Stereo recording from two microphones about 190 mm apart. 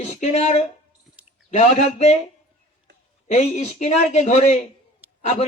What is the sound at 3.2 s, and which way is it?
A man's voice, 35° left (ahead or behind).